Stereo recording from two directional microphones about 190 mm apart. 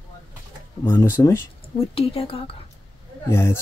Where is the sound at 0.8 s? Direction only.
15° left (ahead or behind).